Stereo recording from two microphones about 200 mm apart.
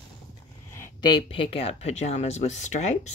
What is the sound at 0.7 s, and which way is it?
Speech, 15° left (ahead or behind).